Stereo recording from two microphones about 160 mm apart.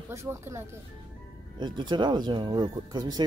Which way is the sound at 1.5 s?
30° right (ahead or behind).